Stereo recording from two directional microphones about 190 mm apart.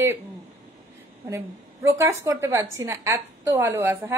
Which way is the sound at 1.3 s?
15° right (ahead or behind).